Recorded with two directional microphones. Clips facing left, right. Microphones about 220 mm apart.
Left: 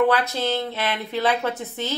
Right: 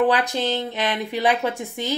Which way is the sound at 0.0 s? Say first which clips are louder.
Even; 15° right (ahead or behind).